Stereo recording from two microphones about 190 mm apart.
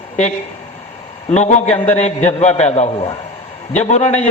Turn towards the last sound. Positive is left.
turn(degrees=35)  # may be behind; listen again after turning